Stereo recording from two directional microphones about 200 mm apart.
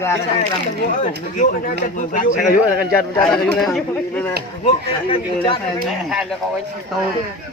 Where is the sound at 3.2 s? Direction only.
5° left (ahead or behind).